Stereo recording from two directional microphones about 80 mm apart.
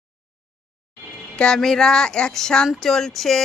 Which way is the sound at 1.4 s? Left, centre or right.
Centre.